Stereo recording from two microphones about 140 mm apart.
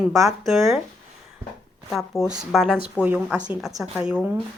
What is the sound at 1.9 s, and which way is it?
Speech, 5° right (ahead or behind).